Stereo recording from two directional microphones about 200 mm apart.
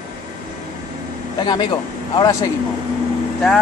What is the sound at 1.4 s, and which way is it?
Speech, 20° left (ahead or behind).